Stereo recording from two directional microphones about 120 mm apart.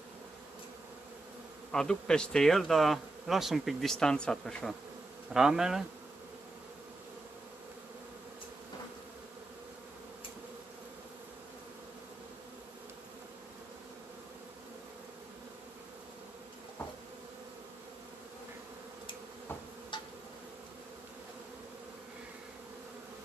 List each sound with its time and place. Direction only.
1.7 s speech: 5° left (ahead or behind)
5.3 s speech: 5° right (ahead or behind)
19.9 s insect: 40° left (ahead or behind)